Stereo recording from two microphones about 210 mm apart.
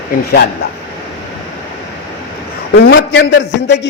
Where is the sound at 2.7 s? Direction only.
55° left (ahead or behind).